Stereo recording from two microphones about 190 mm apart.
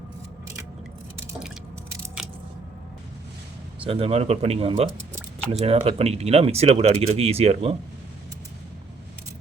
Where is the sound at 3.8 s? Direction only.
30° right (ahead or behind).